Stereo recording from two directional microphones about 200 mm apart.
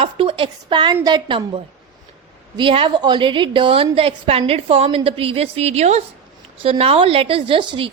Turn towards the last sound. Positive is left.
turn(degrees=-25)  # may be behind; listen again after turning